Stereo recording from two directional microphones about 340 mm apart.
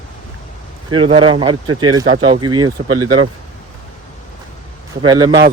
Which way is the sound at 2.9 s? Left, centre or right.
Right.